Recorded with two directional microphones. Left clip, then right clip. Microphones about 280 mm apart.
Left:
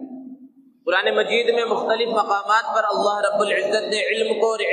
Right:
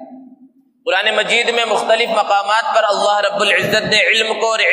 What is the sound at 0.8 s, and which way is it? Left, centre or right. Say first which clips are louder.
A man's voice: right 4 dB; right.